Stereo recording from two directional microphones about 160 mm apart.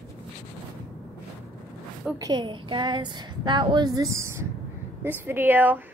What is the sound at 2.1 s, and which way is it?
A woman's voice, 25° right (ahead or behind).